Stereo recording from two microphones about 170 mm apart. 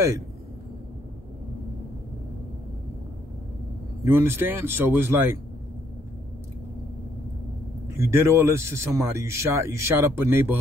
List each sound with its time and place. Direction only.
4.1 s speech: 10° right (ahead or behind)
7.9 s speech: 15° right (ahead or behind)